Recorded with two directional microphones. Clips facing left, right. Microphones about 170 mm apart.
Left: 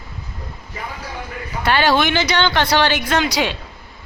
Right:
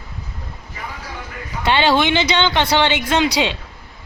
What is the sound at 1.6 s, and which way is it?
A woman's voice, 20° right (ahead or behind).